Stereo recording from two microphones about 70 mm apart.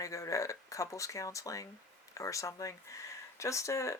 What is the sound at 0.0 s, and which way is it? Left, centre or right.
Speech, left.